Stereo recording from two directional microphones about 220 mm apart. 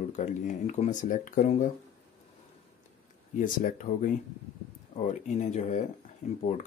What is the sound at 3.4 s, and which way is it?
Speech, 35° left (ahead or behind).